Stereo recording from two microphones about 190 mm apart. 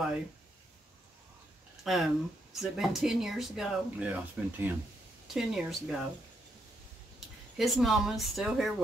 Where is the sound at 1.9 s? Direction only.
Centre (ahead or behind).